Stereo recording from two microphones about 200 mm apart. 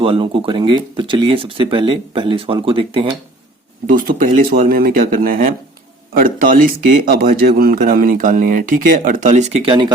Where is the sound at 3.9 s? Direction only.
45° right (ahead or behind).